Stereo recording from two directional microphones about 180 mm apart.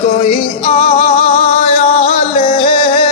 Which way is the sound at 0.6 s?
30° left (ahead or behind).